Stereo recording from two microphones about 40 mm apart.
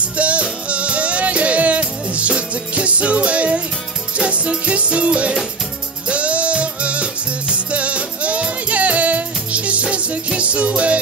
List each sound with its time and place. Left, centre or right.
0.2 s music: right